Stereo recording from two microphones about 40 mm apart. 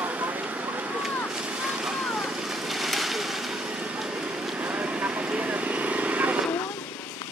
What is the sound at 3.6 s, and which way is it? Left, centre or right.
Vehicle, right.